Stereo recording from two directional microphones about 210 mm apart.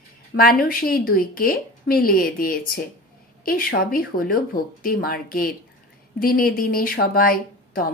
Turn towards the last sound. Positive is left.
turn(degrees=45)  # may be behind; listen again after turning